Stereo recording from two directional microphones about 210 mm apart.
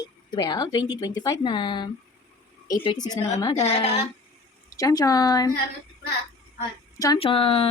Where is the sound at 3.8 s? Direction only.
30° left (ahead or behind).